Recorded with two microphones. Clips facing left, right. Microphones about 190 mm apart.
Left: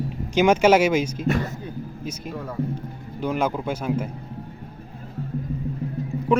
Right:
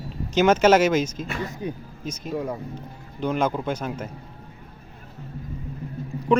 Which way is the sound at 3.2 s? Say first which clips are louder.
Even; 10° left (ahead or behind).